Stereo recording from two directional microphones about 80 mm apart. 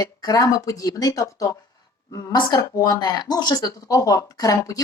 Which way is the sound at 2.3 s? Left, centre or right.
Left.